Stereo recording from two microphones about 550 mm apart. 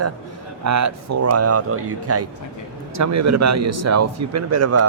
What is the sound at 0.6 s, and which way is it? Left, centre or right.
A man's voice, right.